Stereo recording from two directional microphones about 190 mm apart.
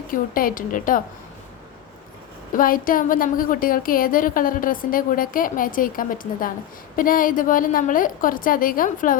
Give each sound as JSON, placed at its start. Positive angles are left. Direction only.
{"t": 0.1, "sound": "a woman's voice", "side_deg": 45}
{"t": 2.5, "sound": "a woman's voice", "side_deg": 45}